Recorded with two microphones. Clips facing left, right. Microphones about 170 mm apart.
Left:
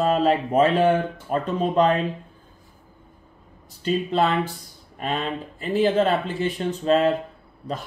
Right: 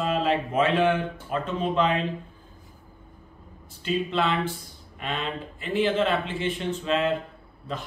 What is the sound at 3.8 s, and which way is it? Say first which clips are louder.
Speech: left 4 dB; 40° left (ahead or behind).